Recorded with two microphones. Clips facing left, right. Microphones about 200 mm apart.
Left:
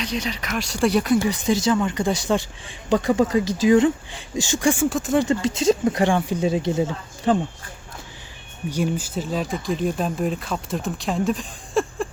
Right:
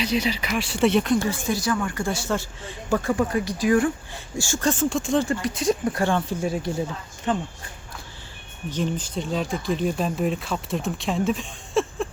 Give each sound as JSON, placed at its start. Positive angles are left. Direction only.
{"t": 0.0, "sound": "speech", "side_deg": -5}
{"t": 1.2, "sound": "speech", "side_deg": 20}
{"t": 5.2, "sound": "speech", "side_deg": 25}
{"t": 8.7, "sound": "speech", "side_deg": 10}